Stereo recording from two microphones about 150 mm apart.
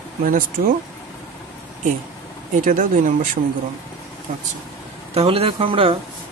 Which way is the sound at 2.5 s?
60° right (ahead or behind).